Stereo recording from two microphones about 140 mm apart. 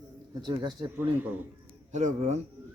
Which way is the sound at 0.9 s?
15° right (ahead or behind).